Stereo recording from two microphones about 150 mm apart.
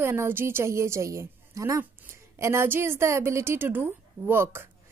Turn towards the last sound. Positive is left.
turn(degrees=-15)  # may be behind; listen again after turning